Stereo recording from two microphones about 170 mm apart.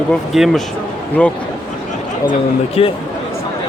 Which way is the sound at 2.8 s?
35° left (ahead or behind).